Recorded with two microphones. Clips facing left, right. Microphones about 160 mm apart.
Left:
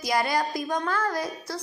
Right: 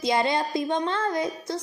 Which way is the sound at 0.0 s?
25° right (ahead or behind).